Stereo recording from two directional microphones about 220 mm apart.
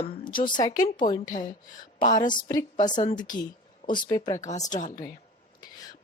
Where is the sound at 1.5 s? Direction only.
35° left (ahead or behind).